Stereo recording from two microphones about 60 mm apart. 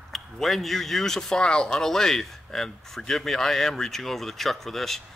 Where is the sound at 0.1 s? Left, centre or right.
Centre.